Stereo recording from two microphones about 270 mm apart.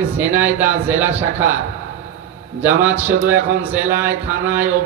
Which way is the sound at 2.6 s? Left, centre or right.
Centre.